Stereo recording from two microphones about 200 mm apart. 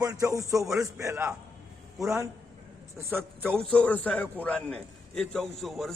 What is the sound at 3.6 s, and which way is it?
A man's voice, 5° left (ahead or behind).